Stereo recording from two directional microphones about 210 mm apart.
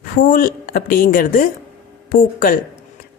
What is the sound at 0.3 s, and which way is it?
Speech, 40° left (ahead or behind).